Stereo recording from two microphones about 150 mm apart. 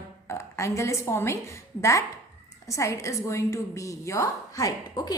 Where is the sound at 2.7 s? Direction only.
20° left (ahead or behind).